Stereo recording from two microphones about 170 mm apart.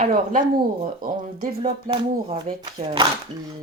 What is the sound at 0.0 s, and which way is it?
Speech, 50° right (ahead or behind).